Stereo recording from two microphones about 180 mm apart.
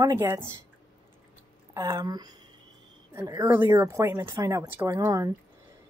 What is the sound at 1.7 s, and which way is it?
Speech, 20° right (ahead or behind).